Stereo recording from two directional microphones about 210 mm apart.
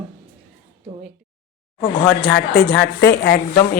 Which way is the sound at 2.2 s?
50° left (ahead or behind).